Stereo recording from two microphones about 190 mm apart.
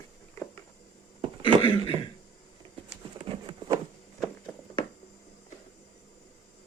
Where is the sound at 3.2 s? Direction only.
25° right (ahead or behind).